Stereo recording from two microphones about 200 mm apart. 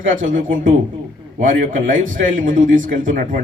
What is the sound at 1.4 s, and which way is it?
A man's voice, 40° right (ahead or behind).